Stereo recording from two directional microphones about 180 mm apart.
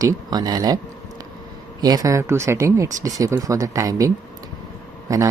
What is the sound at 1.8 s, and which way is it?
Speech, 20° right (ahead or behind).